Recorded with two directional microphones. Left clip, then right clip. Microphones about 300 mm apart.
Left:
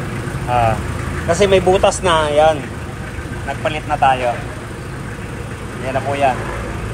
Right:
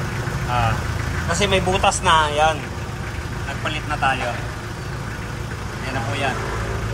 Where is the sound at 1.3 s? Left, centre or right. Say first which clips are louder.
Left 7 dB; centre.